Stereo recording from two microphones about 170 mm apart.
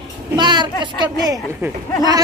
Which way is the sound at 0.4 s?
25° right (ahead or behind).